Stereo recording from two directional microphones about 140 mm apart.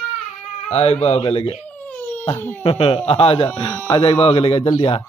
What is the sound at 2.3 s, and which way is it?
Speech, 15° left (ahead or behind).